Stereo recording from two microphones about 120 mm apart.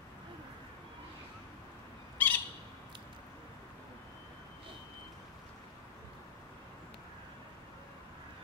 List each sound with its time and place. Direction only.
2.2 s squawk: 15° left (ahead or behind)